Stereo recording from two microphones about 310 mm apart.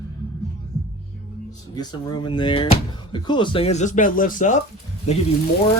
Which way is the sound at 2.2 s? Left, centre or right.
Centre.